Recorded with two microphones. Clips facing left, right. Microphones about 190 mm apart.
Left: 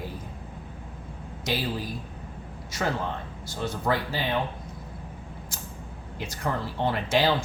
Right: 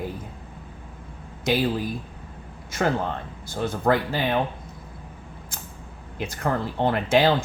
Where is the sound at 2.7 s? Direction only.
55° right (ahead or behind).